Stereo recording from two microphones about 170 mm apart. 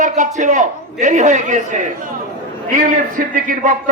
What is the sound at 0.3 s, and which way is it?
A man's voice, 45° right (ahead or behind).